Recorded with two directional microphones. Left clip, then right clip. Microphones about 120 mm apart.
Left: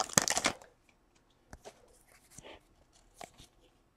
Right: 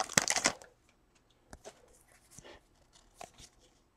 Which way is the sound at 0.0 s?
10° left (ahead or behind).